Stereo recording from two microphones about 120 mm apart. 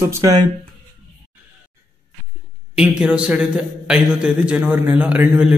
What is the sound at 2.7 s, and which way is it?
A man's voice, 10° right (ahead or behind).